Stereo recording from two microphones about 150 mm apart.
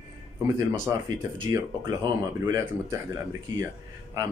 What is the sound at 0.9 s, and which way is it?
Speech, 20° right (ahead or behind).